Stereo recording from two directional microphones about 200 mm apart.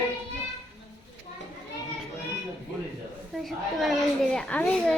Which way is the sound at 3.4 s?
Centre (ahead or behind).